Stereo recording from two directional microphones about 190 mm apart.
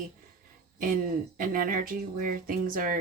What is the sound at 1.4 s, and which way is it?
Speech, 50° right (ahead or behind).